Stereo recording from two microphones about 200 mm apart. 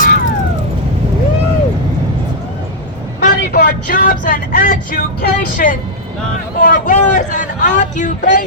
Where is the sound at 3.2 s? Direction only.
45° left (ahead or behind).